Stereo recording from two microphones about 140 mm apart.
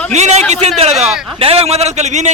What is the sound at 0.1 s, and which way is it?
A man's voice, 55° right (ahead or behind).